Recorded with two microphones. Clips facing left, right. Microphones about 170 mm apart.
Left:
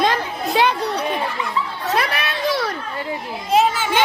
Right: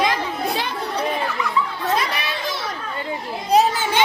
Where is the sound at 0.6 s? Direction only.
65° left (ahead or behind).